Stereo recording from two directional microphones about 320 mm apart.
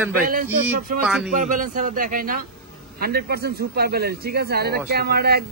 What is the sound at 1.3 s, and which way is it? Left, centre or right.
Speech, right.